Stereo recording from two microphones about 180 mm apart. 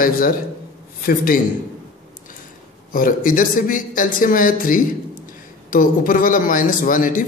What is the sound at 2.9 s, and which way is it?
A man's voice, 50° left (ahead or behind).